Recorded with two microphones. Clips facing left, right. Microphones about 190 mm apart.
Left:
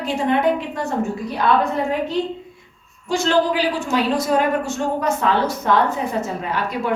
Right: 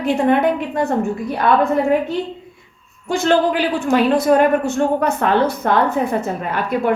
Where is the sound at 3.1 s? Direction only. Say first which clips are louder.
Right 2 dB; 55° right (ahead or behind).